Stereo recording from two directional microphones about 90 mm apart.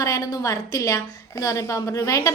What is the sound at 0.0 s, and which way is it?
A woman's voice, 40° left (ahead or behind).